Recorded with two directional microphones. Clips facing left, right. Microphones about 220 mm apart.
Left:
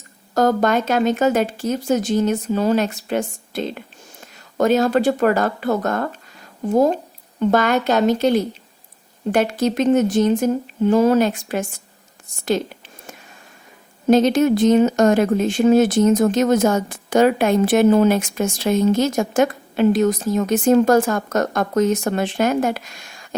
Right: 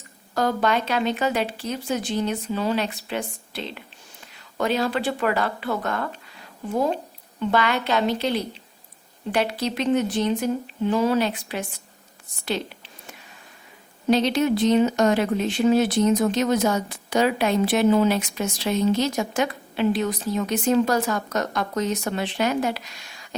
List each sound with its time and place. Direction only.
0.3 s a woman's voice: 45° left (ahead or behind)
12.5 s a sound: 45° left (ahead or behind)
14.1 s speech: 45° left (ahead or behind)